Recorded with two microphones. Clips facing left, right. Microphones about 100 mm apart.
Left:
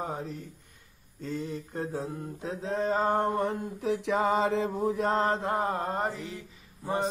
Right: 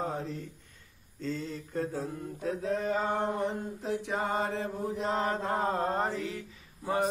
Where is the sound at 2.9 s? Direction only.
40° left (ahead or behind).